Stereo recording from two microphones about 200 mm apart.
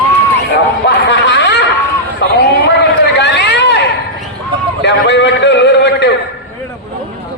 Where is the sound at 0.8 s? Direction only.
55° left (ahead or behind).